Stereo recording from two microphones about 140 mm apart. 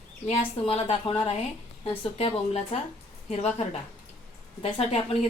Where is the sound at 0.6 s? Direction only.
40° left (ahead or behind).